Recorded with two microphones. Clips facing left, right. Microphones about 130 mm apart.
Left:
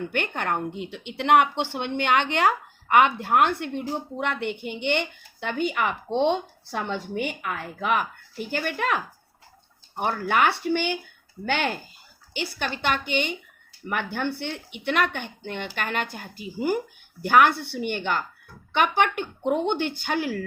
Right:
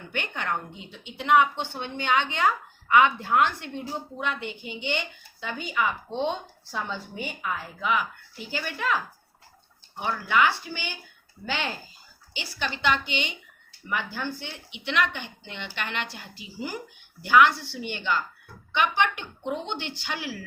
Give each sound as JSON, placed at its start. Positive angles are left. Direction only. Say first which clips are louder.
{"t": 0.1, "sound": "a woman's voice", "louder": "right 2 dB", "side_deg": 55}